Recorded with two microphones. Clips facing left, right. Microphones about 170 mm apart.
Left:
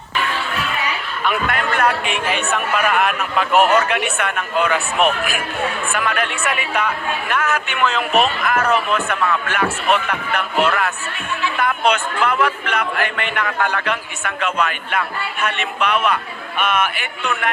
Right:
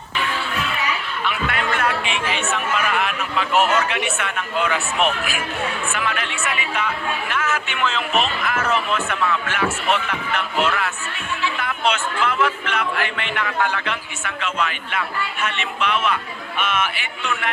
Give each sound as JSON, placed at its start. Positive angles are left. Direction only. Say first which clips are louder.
{"t": 1.2, "sound": "a man's voice", "louder": "left 5 dB", "side_deg": 50}